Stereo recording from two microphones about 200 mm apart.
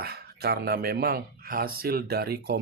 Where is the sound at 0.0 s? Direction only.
50° right (ahead or behind).